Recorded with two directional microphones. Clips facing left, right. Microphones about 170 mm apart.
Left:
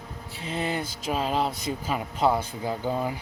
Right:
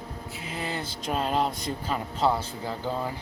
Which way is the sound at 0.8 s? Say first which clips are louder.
Left 1 dB; 5° left (ahead or behind).